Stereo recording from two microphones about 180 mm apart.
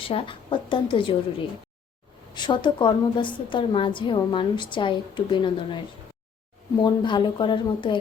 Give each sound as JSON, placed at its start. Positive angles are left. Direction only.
{"t": 0.0, "sound": "a woman's voice", "side_deg": 30}
{"t": 2.3, "sound": "a woman's voice", "side_deg": 25}
{"t": 6.8, "sound": "a woman's voice", "side_deg": 25}